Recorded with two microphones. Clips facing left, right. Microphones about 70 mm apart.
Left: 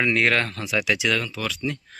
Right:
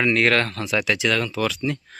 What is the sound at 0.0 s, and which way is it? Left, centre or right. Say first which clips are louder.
Speech: right 2 dB; centre.